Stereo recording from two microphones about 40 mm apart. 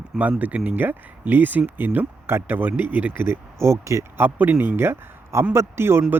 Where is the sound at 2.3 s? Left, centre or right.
Right.